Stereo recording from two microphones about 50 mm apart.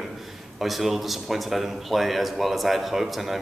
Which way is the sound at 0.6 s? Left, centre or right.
Centre.